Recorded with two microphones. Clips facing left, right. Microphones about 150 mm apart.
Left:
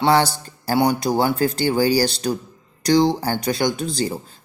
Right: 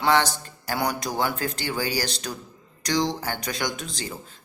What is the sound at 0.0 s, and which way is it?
Speech, 30° left (ahead or behind).